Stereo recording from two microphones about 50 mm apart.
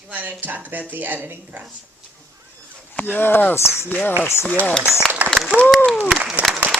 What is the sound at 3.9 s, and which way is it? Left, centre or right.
Speech, left.